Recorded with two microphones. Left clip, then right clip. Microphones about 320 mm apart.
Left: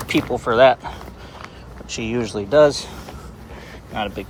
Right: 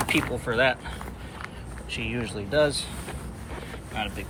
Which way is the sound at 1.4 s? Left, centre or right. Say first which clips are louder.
Left 1 dB; centre.